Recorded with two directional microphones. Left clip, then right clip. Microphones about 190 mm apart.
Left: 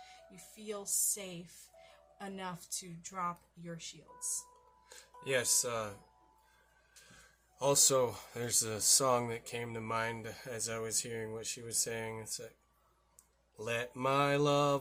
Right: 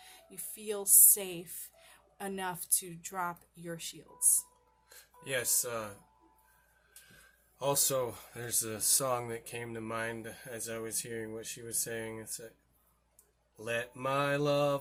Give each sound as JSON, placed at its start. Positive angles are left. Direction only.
{"t": 0.0, "sound": "speech", "side_deg": -40}
{"t": 4.9, "sound": "speech", "side_deg": 25}
{"t": 7.6, "sound": "speech", "side_deg": 25}
{"t": 13.6, "sound": "speech", "side_deg": 25}